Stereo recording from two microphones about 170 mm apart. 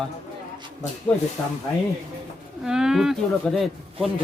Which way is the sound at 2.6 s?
5° right (ahead or behind).